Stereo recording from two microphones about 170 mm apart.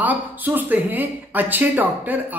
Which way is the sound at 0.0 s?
10° right (ahead or behind).